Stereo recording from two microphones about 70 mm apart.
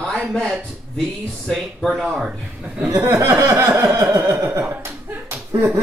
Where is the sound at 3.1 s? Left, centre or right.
Right.